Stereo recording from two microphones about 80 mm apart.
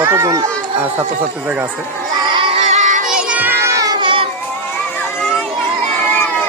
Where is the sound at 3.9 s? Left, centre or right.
Right.